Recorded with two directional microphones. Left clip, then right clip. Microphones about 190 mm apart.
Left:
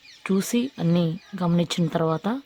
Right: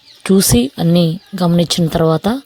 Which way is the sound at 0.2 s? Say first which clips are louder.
Right 12 dB; 20° right (ahead or behind).